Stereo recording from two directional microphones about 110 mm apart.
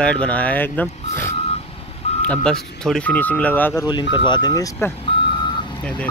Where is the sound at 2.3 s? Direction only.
5° left (ahead or behind).